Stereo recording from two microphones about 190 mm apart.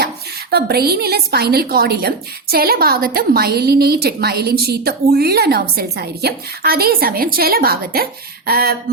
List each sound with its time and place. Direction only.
0.5 s a woman's voice: 55° right (ahead or behind)